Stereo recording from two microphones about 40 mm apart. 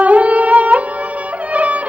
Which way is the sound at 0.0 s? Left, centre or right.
Right.